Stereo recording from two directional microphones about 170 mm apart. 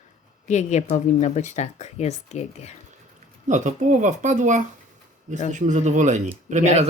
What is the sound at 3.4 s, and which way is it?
Speech, 45° right (ahead or behind).